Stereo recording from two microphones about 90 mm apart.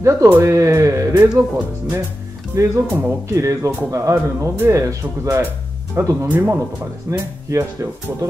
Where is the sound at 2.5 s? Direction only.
35° right (ahead or behind).